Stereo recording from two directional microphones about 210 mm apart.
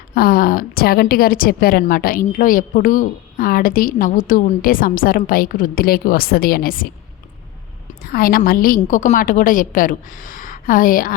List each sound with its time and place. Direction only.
0.1 s a woman's voice: 45° left (ahead or behind)
8.0 s a woman's voice: 45° left (ahead or behind)